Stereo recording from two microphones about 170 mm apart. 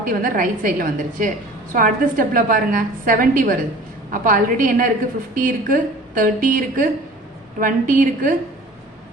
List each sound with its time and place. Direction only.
0.0 s a woman's voice: 55° right (ahead or behind)